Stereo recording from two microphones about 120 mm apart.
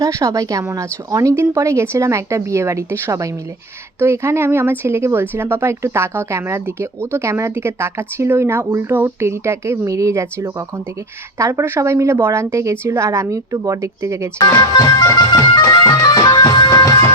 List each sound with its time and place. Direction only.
0.0 s speech: 25° right (ahead or behind)
14.5 s music: 30° left (ahead or behind)